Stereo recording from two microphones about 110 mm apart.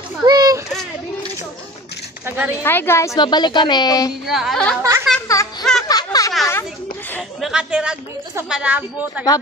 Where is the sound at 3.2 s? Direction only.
40° left (ahead or behind).